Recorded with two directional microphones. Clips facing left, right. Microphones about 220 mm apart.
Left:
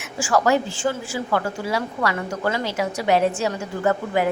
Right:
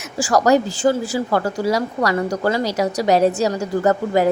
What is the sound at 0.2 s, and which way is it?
A woman's voice, 40° right (ahead or behind).